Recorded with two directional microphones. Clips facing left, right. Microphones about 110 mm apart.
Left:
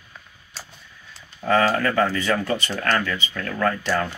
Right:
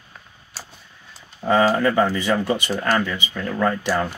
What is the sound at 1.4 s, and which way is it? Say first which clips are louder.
Speech: right 2 dB; 20° right (ahead or behind).